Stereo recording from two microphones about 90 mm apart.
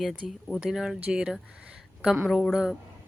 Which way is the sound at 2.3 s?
5° left (ahead or behind).